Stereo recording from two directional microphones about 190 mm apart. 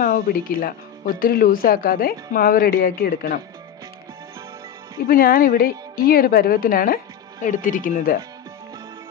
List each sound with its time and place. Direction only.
0.0 s speech: 50° left (ahead or behind)
5.0 s speech: 50° left (ahead or behind)